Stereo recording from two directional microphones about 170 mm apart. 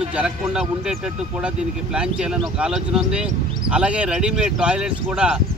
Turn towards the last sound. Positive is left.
turn(degrees=-5)  # may be behind; listen again after turning